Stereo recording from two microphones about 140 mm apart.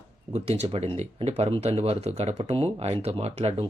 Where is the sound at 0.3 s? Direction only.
50° right (ahead or behind).